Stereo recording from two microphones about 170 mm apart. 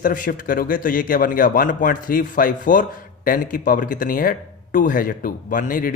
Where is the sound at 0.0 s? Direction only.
55° left (ahead or behind).